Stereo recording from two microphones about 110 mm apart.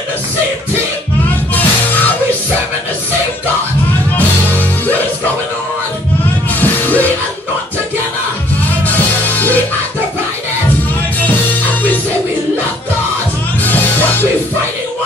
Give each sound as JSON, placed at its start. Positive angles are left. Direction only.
{"t": 6.6, "sound": "music", "side_deg": 15}
{"t": 8.8, "sound": "music", "side_deg": 15}
{"t": 13.7, "sound": "music", "side_deg": 15}